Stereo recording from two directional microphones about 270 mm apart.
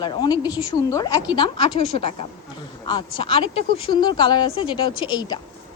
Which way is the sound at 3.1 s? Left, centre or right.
Centre.